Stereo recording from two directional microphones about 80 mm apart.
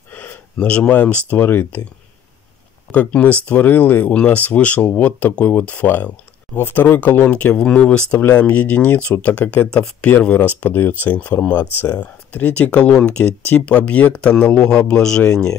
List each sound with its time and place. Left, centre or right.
0.1 s a sound: left
0.6 s speech: centre
1.3 s speech: left
2.9 s speech: centre